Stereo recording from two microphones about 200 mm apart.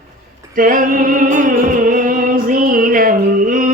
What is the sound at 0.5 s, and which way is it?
Music, 45° right (ahead or behind).